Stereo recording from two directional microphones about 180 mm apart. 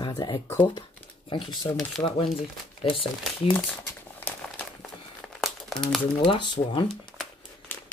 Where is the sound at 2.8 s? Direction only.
30° left (ahead or behind).